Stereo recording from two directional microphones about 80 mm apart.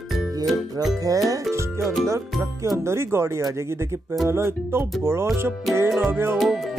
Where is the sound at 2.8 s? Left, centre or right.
Right.